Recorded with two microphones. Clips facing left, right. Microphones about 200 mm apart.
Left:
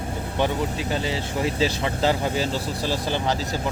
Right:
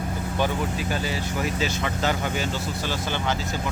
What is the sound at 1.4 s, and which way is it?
Speech, 30° left (ahead or behind).